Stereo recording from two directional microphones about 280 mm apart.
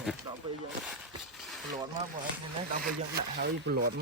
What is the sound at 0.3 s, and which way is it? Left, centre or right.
Snake, centre.